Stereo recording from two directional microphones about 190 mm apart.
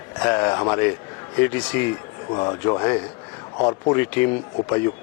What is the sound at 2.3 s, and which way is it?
A man's voice, 25° left (ahead or behind).